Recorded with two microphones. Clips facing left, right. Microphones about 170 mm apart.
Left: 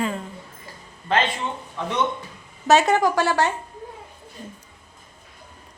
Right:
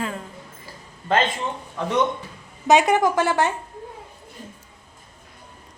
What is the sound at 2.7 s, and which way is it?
Speech, 15° right (ahead or behind).